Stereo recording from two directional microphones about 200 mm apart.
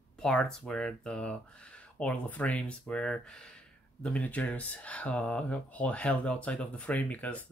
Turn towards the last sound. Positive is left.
turn(degrees=5)  # may be behind; listen again after turning